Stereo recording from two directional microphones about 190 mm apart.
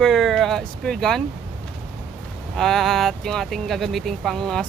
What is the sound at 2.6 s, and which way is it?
Speech, centre (ahead or behind).